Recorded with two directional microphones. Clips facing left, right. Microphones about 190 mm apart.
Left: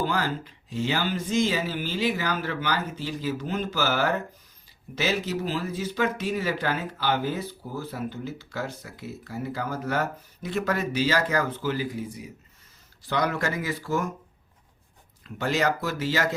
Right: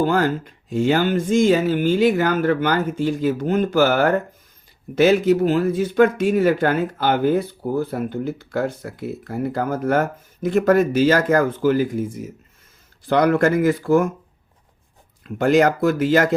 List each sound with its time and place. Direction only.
0.0 s speech: 50° right (ahead or behind)
15.2 s speech: 55° right (ahead or behind)